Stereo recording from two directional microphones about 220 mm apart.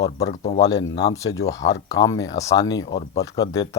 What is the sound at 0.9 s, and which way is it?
Speech, 15° left (ahead or behind).